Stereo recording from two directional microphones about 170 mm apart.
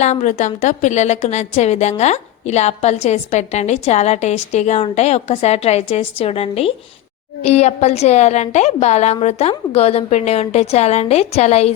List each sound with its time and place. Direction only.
0.0 s a woman's voice: 45° left (ahead or behind)